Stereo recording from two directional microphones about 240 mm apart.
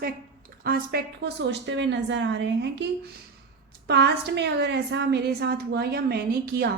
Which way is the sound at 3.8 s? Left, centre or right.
Right.